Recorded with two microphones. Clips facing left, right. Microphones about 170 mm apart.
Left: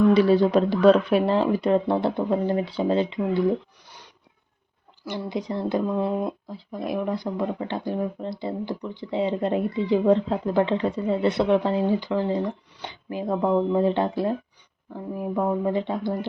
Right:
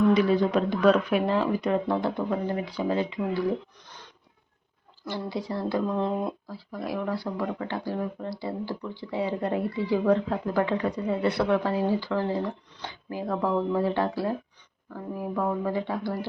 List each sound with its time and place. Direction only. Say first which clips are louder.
0.1 s speech: left 4 dB; 30° left (ahead or behind)
3.8 s a sound: even; 10° left (ahead or behind)
5.0 s speech: left 2 dB; 20° left (ahead or behind)
5.9 s speech: left 2 dB; 5° left (ahead or behind)
6.2 s speech: left 2 dB; 20° left (ahead or behind)